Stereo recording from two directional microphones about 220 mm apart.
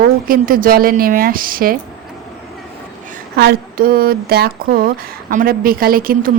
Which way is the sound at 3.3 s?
45° right (ahead or behind).